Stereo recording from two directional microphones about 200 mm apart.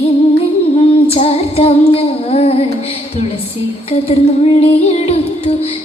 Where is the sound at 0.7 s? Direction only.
30° left (ahead or behind).